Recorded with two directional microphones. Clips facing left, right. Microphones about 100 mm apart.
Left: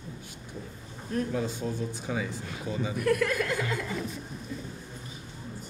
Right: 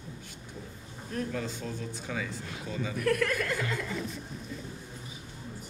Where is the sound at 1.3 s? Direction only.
15° left (ahead or behind).